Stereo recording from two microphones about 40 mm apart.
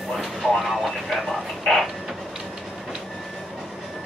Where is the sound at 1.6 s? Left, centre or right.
Centre.